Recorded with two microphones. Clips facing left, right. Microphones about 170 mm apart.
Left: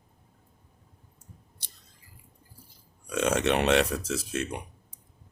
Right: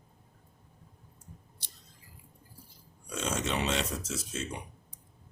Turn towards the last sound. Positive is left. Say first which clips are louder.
# left 6 dB
turn(degrees=65)  # may be behind; listen again after turning